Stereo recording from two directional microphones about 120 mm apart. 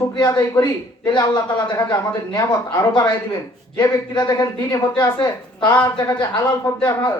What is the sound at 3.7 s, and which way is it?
Speech, 35° left (ahead or behind).